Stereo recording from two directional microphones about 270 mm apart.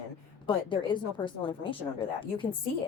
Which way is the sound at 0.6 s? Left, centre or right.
Centre.